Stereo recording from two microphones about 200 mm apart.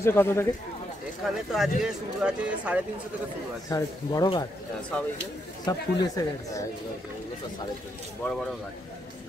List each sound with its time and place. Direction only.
0.0 s speech: 10° left (ahead or behind)
1.2 s speech: centre (ahead or behind)
3.7 s speech: 20° left (ahead or behind)
5.7 s speech: 15° left (ahead or behind)
8.2 s speech: 5° left (ahead or behind)